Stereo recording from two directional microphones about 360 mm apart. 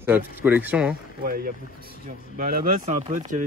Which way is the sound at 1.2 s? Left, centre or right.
Right.